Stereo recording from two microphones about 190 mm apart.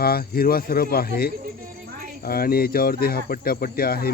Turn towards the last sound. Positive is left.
turn(degrees=55)  # may be behind; listen again after turning